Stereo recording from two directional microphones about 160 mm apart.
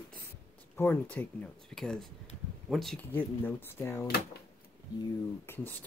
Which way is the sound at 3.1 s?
15° left (ahead or behind).